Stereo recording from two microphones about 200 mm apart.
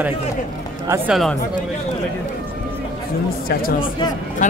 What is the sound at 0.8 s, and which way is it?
Speech, 15° right (ahead or behind).